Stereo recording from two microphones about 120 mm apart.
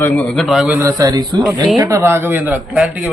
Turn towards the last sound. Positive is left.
turn(degrees=-15)  # may be behind; listen again after turning